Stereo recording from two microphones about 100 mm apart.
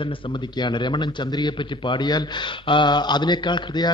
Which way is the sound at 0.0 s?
60° left (ahead or behind).